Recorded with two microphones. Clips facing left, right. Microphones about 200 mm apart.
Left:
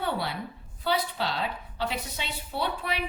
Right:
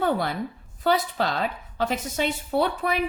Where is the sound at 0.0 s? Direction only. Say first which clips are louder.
Right 6 dB; 45° right (ahead or behind).